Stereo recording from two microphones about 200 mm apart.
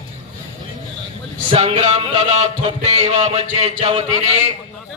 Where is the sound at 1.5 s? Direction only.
30° right (ahead or behind).